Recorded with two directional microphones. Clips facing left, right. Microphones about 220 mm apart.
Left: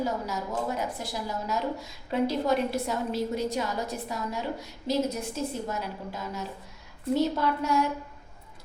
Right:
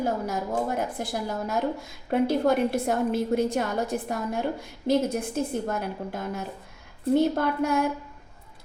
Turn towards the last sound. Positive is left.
turn(degrees=-55)  # may be behind; listen again after turning